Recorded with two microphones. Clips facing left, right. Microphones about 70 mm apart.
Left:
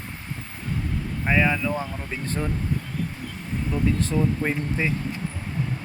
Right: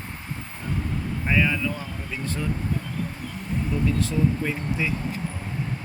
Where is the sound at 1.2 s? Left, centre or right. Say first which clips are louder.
Left 2 dB; left.